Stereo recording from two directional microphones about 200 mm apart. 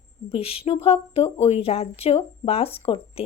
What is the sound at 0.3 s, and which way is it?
A woman's voice, 30° left (ahead or behind).